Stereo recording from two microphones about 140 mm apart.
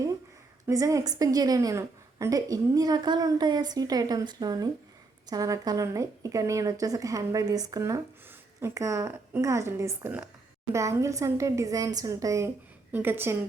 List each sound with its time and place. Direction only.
0.7 s a woman's voice: 25° right (ahead or behind)